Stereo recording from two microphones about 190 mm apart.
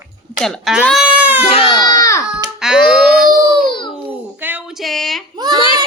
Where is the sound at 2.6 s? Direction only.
5° right (ahead or behind).